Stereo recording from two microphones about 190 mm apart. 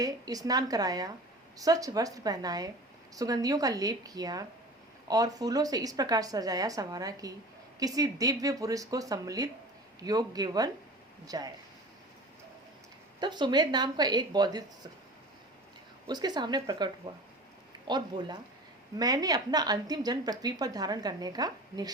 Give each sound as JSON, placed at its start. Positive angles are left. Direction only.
{"t": 0.0, "sound": "a woman's voice", "side_deg": -20}
{"t": 13.1, "sound": "a woman's voice", "side_deg": -25}
{"t": 16.0, "sound": "a woman's voice", "side_deg": -20}